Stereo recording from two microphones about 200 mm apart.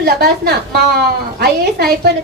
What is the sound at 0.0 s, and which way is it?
A woman's voice, 55° right (ahead or behind).